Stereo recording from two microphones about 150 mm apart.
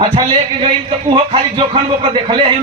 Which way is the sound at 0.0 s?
35° right (ahead or behind).